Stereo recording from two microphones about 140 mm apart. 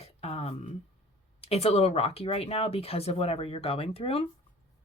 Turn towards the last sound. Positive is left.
turn(degrees=45)  # may be behind; listen again after turning